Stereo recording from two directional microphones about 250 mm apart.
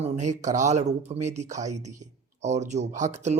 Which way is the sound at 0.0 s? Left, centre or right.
Right.